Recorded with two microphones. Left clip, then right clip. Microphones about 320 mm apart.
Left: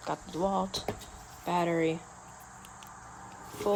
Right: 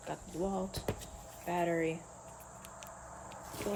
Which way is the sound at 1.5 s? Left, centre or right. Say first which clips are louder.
Left 5 dB; left.